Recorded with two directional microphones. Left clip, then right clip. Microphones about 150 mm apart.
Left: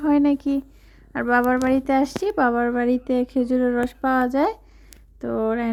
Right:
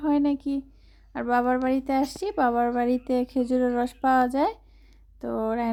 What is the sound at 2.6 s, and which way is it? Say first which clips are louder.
A woman's voice: left 2 dB; 15° left (ahead or behind).